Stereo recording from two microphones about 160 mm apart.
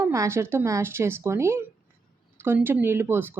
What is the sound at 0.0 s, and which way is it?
A woman's voice, 15° right (ahead or behind).